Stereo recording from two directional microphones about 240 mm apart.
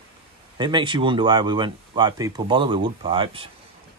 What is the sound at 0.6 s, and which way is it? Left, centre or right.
Speech, centre.